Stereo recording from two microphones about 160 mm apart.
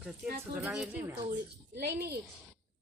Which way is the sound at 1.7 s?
90° right.